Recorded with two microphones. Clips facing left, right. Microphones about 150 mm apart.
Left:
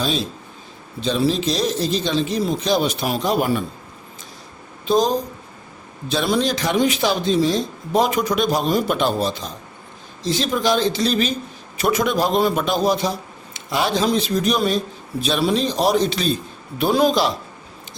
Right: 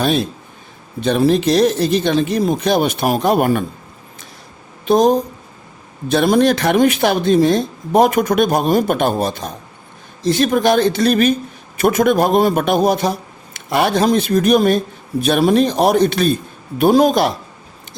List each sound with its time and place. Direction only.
0.0 s speech: 55° right (ahead or behind)
4.9 s speech: 55° right (ahead or behind)